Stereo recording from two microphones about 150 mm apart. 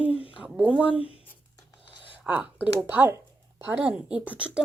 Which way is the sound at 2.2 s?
10° right (ahead or behind).